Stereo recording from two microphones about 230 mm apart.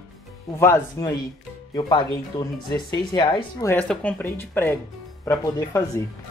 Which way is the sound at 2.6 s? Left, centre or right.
Centre.